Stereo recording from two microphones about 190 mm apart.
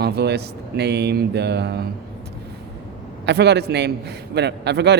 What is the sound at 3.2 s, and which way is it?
Speech, 60° right (ahead or behind).